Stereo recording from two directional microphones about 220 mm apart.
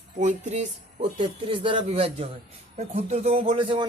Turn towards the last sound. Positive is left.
turn(degrees=-25)  # may be behind; listen again after turning